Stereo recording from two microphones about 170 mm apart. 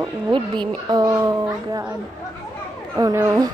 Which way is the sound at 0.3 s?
25° right (ahead or behind).